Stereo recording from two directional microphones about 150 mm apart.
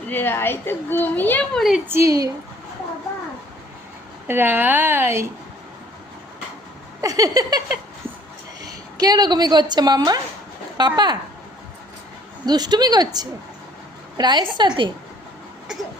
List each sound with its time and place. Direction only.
0.1 s a woman's voice: 15° left (ahead or behind)
1.9 s a woman's voice: 20° right (ahead or behind)
4.3 s a woman's voice: 15° right (ahead or behind)
7.0 s a woman's voice: 20° right (ahead or behind)
9.0 s a woman's voice: 25° right (ahead or behind)
12.5 s a woman's voice: 25° right (ahead or behind)